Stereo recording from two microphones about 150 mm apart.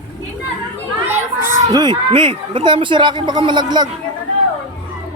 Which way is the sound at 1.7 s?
30° right (ahead or behind).